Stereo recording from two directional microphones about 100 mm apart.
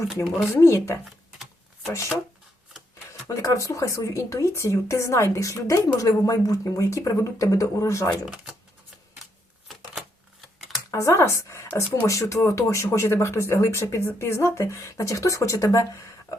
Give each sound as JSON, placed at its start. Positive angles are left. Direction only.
{"t": 0.5, "sound": "speech", "side_deg": 30}
{"t": 3.1, "sound": "speech", "side_deg": 30}
{"t": 10.8, "sound": "speech", "side_deg": 30}